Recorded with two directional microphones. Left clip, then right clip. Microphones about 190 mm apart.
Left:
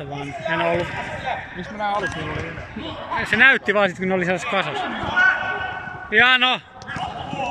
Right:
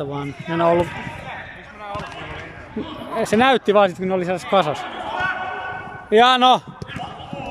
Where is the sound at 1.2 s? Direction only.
55° left (ahead or behind).